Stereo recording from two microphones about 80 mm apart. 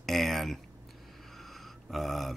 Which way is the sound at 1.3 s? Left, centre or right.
Centre.